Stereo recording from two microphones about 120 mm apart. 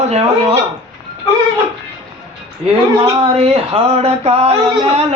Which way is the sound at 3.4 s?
55° right (ahead or behind).